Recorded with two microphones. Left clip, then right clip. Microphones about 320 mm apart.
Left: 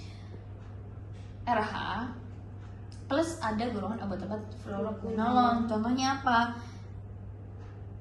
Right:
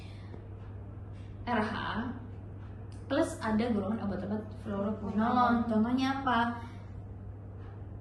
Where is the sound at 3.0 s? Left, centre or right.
Centre.